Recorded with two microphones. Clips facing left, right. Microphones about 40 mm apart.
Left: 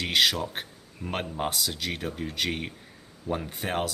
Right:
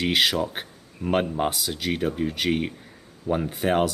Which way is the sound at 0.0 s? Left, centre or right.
Centre.